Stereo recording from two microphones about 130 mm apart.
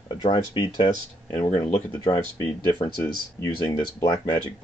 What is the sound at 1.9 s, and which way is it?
Speech, 30° left (ahead or behind).